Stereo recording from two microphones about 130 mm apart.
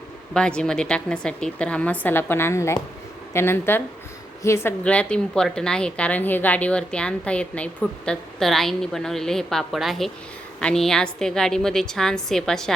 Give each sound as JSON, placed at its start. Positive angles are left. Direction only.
{"t": 0.3, "sound": "a woman's voice", "side_deg": 5}
{"t": 4.8, "sound": "a woman's voice", "side_deg": 10}